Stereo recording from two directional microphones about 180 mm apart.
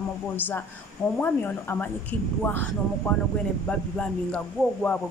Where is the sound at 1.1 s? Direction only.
10° left (ahead or behind).